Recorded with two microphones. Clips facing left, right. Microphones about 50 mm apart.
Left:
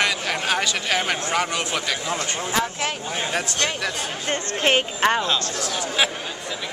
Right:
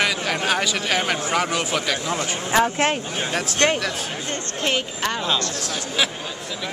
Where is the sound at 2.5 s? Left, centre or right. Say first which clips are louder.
Right 7 dB; right.